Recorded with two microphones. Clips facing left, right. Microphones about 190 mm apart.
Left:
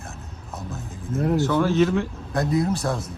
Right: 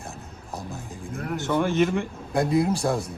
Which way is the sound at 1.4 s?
15° right (ahead or behind).